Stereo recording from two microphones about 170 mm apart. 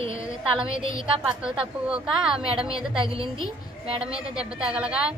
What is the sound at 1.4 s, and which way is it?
A woman's voice, 5° right (ahead or behind).